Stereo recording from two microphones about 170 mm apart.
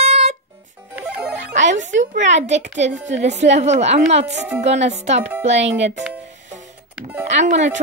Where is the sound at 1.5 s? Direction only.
45° right (ahead or behind).